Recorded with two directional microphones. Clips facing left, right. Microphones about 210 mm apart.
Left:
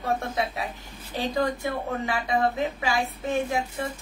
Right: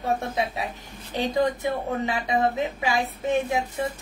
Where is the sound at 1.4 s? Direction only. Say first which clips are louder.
Right 3 dB; 20° right (ahead or behind).